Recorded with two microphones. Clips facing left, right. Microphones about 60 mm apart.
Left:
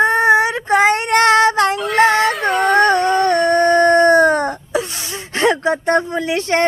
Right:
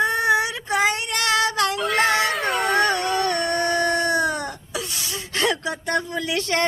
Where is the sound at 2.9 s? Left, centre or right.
Left.